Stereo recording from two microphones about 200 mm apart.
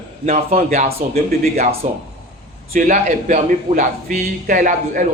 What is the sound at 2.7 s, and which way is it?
Speech, 40° right (ahead or behind).